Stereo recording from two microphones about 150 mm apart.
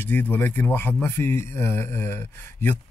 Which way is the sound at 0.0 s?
10° left (ahead or behind).